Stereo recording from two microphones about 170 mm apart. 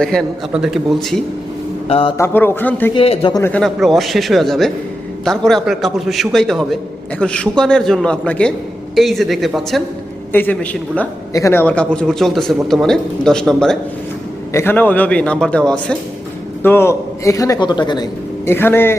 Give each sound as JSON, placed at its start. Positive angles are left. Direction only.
{"t": 0.0, "sound": "speech", "side_deg": 5}
{"t": 1.9, "sound": "speech", "side_deg": 35}
{"t": 2.1, "sound": "a man's voice", "side_deg": 15}
{"t": 2.9, "sound": "speech", "side_deg": 30}
{"t": 3.3, "sound": "a man's voice", "side_deg": 15}
{"t": 3.6, "sound": "a man's voice", "side_deg": 0}
{"t": 14.5, "sound": "a man's voice", "side_deg": 15}
{"t": 18.4, "sound": "a man's voice", "side_deg": 15}